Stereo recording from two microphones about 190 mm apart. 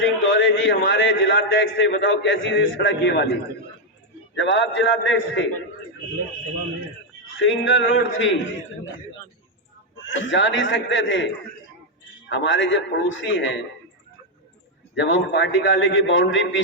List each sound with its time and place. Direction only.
0.0 s a man's voice: 75° left (ahead or behind)
4.4 s a man's voice: 70° left (ahead or behind)
7.4 s speech: 75° left (ahead or behind)
10.0 s a man's voice: 75° left (ahead or behind)
12.3 s a man's voice: 75° left (ahead or behind)
14.9 s a man's voice: 75° left (ahead or behind)